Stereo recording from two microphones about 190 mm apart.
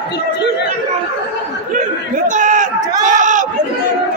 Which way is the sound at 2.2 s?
40° right (ahead or behind).